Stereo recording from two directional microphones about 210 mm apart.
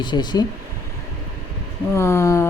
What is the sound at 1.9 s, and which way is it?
Speech, 15° left (ahead or behind).